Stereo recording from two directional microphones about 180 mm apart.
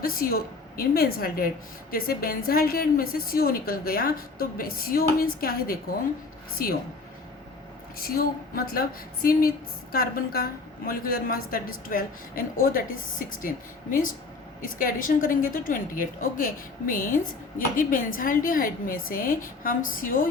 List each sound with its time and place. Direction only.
0.0 s a woman's voice: 55° left (ahead or behind)
7.9 s a woman's voice: 55° left (ahead or behind)
14.8 s a woman's voice: 50° left (ahead or behind)